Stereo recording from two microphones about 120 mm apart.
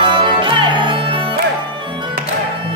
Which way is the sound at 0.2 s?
40° right (ahead or behind).